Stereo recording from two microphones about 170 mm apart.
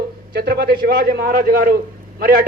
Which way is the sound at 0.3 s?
65° right (ahead or behind).